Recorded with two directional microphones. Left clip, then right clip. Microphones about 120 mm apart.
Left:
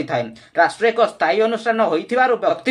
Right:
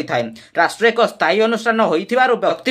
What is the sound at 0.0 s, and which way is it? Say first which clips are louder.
Speech: right 2 dB; 30° right (ahead or behind).